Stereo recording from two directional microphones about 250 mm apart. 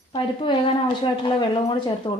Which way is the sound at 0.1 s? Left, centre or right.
Left.